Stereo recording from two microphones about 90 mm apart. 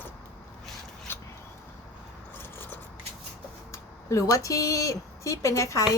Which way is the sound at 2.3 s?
25° left (ahead or behind).